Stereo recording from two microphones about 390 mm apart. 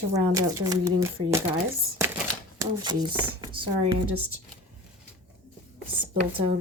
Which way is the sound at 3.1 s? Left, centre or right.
Centre.